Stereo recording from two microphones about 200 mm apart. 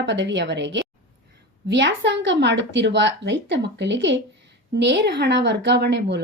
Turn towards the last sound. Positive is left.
turn(degrees=-60)  # may be behind; listen again after turning